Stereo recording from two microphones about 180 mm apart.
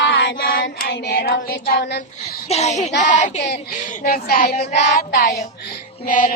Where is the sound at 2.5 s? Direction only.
40° left (ahead or behind).